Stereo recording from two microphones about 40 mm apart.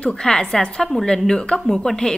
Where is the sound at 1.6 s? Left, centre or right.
Centre.